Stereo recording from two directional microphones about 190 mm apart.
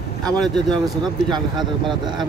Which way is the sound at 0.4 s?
Centre (ahead or behind).